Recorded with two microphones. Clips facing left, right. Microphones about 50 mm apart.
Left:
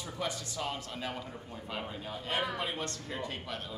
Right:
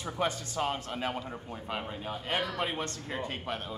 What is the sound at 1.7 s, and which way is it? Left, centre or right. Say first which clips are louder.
Speech: right 2 dB; right.